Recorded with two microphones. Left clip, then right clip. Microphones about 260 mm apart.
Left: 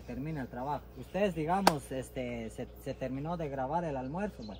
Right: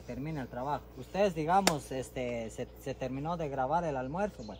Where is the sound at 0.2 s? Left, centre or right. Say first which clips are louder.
Right 1 dB; centre.